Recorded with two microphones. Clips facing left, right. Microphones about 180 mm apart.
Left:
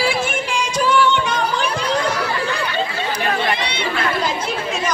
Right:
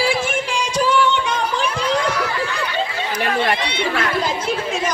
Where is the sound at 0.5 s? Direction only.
35° right (ahead or behind).